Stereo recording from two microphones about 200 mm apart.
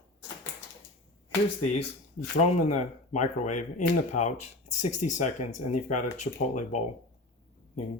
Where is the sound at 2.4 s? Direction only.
35° left (ahead or behind).